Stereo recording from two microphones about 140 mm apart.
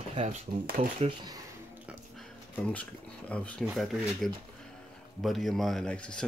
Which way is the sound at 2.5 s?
10° left (ahead or behind).